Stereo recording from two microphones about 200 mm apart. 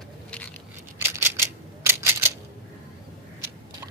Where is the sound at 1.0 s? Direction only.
15° right (ahead or behind).